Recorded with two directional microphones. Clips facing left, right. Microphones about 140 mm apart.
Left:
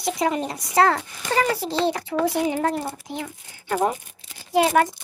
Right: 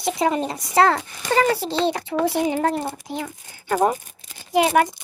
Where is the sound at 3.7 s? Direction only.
45° right (ahead or behind).